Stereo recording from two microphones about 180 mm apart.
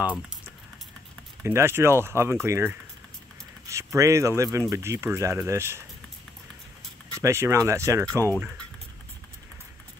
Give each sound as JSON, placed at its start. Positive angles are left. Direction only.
{"t": 1.4, "sound": "speech", "side_deg": -15}
{"t": 7.2, "sound": "speech", "side_deg": -15}
{"t": 8.0, "sound": "speech", "side_deg": 10}